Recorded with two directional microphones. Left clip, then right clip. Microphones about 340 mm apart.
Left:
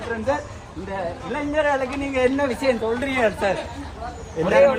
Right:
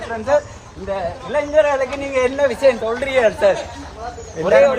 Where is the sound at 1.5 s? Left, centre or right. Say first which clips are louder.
Right 5 dB; right.